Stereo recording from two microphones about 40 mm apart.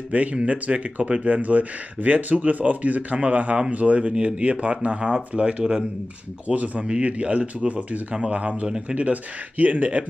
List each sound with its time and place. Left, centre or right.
0.1 s speech: right
8.1 s speech: right
8.6 s speech: centre
8.9 s speech: right